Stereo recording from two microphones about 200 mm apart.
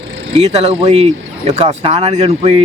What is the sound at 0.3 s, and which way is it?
Speech, 30° right (ahead or behind).